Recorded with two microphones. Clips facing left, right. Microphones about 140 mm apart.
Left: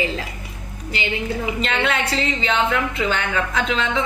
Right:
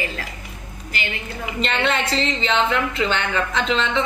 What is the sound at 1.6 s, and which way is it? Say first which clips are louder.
A woman's voice: right 3 dB; 5° left (ahead or behind).